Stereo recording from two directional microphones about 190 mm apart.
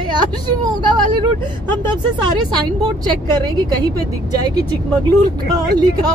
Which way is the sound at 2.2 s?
25° right (ahead or behind).